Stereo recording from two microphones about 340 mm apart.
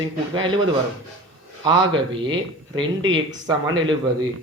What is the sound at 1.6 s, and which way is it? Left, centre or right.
Speech, centre.